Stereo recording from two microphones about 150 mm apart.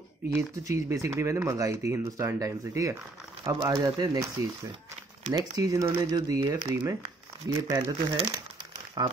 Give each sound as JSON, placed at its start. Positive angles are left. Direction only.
{"t": 0.3, "sound": "speech", "side_deg": -15}
{"t": 5.3, "sound": "speech", "side_deg": -25}
{"t": 7.8, "sound": "speech", "side_deg": -35}